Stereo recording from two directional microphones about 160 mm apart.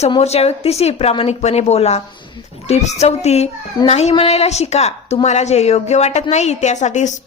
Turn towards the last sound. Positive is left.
turn(degrees=50)  # may be behind; listen again after turning